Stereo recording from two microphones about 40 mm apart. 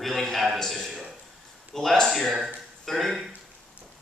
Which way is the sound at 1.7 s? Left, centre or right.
Centre.